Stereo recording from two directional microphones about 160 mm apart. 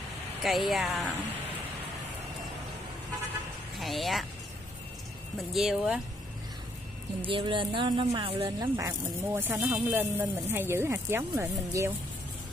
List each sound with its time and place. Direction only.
0.4 s speech: centre (ahead or behind)
3.8 s speech: centre (ahead or behind)
5.5 s speech: centre (ahead or behind)
7.2 s speech: 30° right (ahead or behind)
8.5 s speech: 20° right (ahead or behind)